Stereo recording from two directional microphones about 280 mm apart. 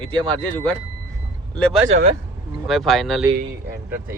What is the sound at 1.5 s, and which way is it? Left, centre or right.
Speech, centre.